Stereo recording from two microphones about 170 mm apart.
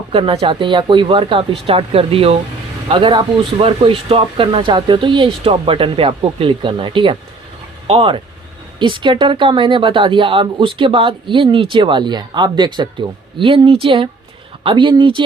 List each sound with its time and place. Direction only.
0.1 s speech: 30° right (ahead or behind)